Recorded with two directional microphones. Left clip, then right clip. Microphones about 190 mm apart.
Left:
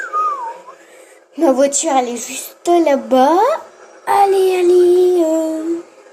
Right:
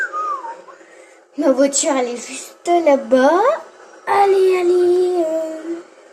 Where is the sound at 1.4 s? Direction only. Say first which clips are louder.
Left 2 dB; 40° left (ahead or behind).